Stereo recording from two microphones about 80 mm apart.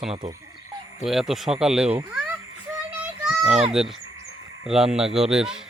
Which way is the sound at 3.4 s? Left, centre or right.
Centre.